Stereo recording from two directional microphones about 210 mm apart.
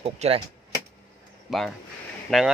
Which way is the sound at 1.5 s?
Centre (ahead or behind).